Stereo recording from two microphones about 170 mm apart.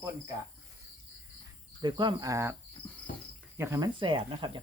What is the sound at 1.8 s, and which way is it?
Speech, 25° right (ahead or behind).